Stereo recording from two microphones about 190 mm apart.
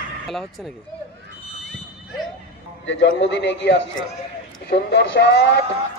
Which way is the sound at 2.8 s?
80° left.